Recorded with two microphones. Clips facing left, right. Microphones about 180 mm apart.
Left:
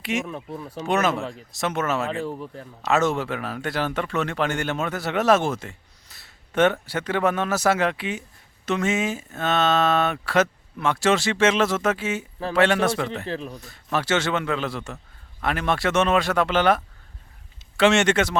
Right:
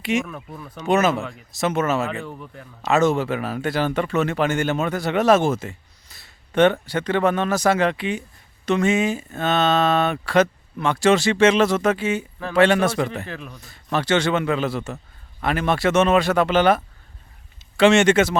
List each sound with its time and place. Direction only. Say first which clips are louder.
0.0 s speech: right 4 dB; centre (ahead or behind)
0.3 s speech: left 3 dB; 30° left (ahead or behind)
0.9 s speech: right 4 dB; centre (ahead or behind)
1.2 s speech: left 1 dB; 30° left (ahead or behind)
1.5 s speech: right 4 dB; centre (ahead or behind)
2.2 s speech: left 4 dB; 30° left (ahead or behind)
2.8 s speech: right 3 dB; centre (ahead or behind)
13.2 s speech: left 4 dB; 30° left (ahead or behind)
13.6 s speech: right 2 dB; centre (ahead or behind)